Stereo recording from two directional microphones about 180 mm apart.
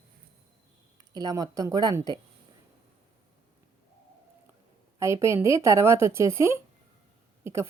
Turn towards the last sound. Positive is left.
turn(degrees=-15)  # may be behind; listen again after turning